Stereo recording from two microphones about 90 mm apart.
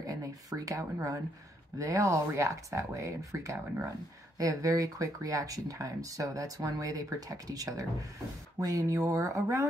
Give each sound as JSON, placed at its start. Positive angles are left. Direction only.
{"t": 0.0, "sound": "a sound", "side_deg": -40}
{"t": 0.9, "sound": "speech", "side_deg": -35}
{"t": 3.5, "sound": "speech", "side_deg": -25}
{"t": 4.4, "sound": "speech", "side_deg": -40}